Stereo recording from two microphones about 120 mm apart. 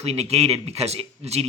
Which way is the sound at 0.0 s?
60° right (ahead or behind).